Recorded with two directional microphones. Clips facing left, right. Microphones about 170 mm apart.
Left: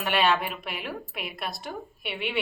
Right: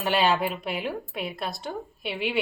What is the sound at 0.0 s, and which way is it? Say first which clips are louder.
A woman's voice: right 2 dB; 30° right (ahead or behind).